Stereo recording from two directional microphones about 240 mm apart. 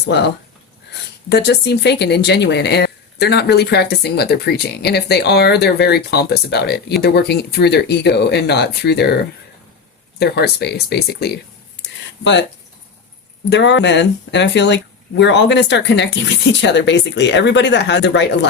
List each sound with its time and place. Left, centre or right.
0.0 s speech: left
1.3 s speech: left
10.2 s speech: left
11.8 s a sound: left
13.5 s speech: left